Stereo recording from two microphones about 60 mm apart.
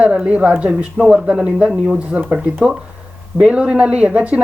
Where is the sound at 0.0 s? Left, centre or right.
Right.